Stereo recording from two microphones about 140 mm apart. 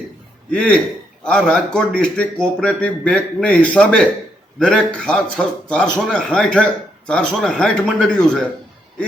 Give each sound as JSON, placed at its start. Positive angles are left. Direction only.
{"t": 0.5, "sound": "a man's voice", "side_deg": 5}